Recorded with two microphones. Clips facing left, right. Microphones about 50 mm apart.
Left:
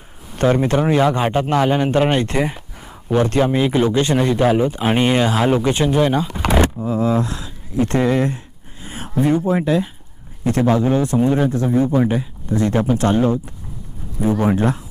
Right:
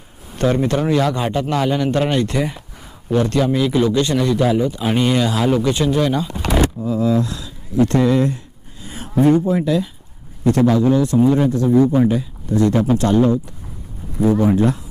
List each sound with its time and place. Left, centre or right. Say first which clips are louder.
0.4 s speech: left 1 dB; centre
8.8 s a sound: left 1 dB; left
9.2 s speech: right 4 dB; centre
9.5 s a man's voice: even; left